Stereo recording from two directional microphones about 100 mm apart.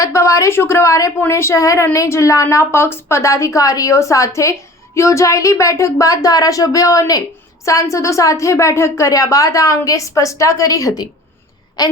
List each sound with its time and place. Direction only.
0.0 s a woman's voice: 30° left (ahead or behind)